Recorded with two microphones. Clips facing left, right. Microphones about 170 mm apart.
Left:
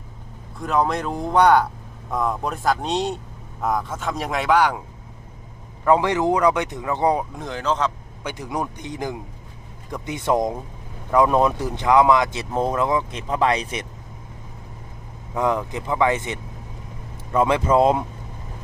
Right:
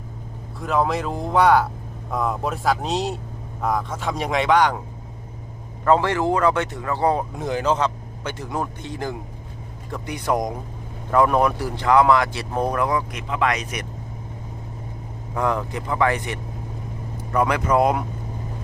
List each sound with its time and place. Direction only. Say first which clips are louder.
0.6 s speech: even; centre (ahead or behind)
5.8 s a man's voice: left 1 dB; 15° left (ahead or behind)
7.3 s speech: right 3 dB; 10° right (ahead or behind)
8.2 s a man's voice: even; 15° left (ahead or behind); by 13.8 s 30° left (ahead or behind)
15.4 s speech: left 1 dB; 20° left (ahead or behind)